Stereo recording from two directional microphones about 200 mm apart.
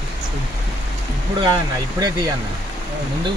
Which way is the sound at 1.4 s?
20° right (ahead or behind).